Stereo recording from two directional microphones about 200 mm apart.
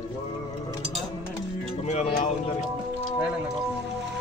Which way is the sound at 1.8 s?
35° left (ahead or behind).